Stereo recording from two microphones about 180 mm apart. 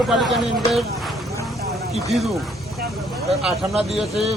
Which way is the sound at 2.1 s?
Centre (ahead or behind).